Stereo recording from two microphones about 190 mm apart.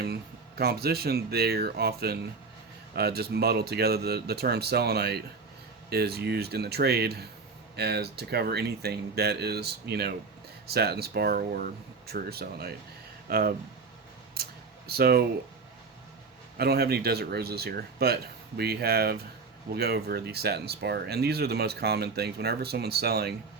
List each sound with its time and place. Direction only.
0.0 s speech: 55° right (ahead or behind)
14.4 s a sound: 55° right (ahead or behind)
14.8 s speech: 55° right (ahead or behind)
16.6 s speech: 55° right (ahead or behind)